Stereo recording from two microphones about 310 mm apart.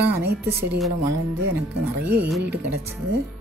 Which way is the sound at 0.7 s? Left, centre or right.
Centre.